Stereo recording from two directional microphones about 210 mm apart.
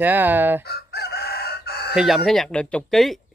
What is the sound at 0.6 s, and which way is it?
Chicken, 50° left (ahead or behind).